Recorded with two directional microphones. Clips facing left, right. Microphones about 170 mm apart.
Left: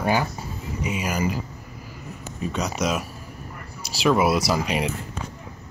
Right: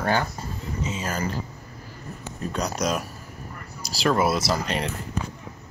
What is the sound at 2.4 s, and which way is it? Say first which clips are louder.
Speech: left 1 dB; 5° left (ahead or behind).